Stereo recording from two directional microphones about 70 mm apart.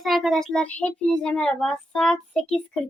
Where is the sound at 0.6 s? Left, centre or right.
Centre.